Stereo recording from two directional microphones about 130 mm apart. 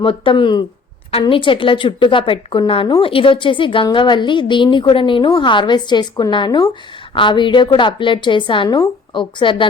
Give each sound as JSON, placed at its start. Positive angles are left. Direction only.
{"t": 0.0, "sound": "a woman's voice", "side_deg": 40}